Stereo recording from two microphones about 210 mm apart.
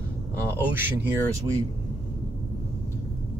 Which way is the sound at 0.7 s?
10° right (ahead or behind).